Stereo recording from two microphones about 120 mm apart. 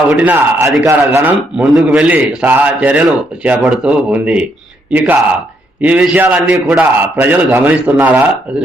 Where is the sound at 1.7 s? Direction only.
5° right (ahead or behind).